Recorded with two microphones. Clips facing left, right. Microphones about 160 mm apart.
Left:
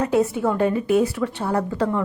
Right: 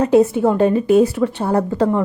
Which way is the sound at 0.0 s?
25° right (ahead or behind).